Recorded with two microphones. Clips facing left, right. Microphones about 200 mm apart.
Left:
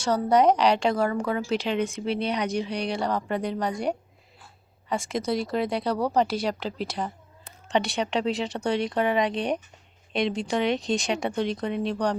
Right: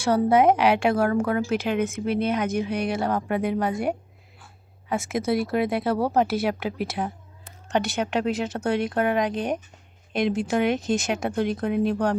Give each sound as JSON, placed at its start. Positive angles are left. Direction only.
{"t": 0.0, "sound": "speech", "side_deg": -10}
{"t": 6.6, "sound": "speech", "side_deg": -55}
{"t": 6.8, "sound": "speech", "side_deg": -5}